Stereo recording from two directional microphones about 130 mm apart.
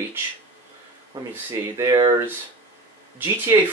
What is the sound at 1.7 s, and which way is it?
Speech, 25° right (ahead or behind).